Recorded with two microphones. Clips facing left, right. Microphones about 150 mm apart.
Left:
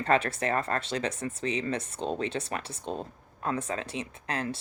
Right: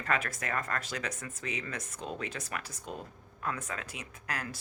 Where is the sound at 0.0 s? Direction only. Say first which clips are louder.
Left 8 dB; 30° left (ahead or behind).